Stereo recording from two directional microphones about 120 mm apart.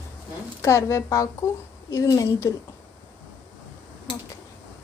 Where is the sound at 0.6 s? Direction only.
25° left (ahead or behind).